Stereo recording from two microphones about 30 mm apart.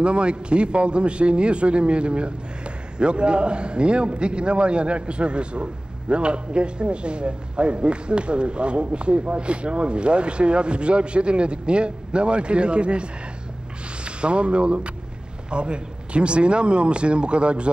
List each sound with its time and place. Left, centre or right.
0.0 s a man's voice: right